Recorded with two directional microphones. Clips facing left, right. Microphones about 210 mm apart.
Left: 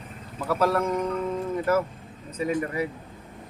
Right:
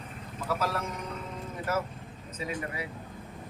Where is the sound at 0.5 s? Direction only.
55° left (ahead or behind).